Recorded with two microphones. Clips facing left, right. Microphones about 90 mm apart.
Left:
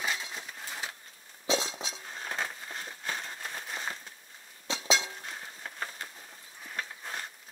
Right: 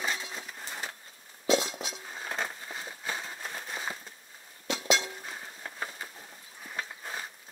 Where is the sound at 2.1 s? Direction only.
5° right (ahead or behind).